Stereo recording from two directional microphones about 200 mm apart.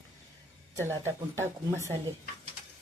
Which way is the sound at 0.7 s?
15° right (ahead or behind).